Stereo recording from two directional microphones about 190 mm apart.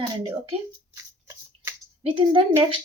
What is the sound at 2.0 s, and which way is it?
Speech, 25° right (ahead or behind).